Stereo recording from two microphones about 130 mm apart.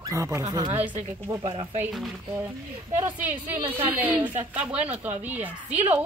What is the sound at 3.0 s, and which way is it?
A woman's voice, 15° right (ahead or behind).